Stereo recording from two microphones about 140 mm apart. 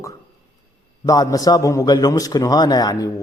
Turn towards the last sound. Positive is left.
turn(degrees=25)  # may be behind; listen again after turning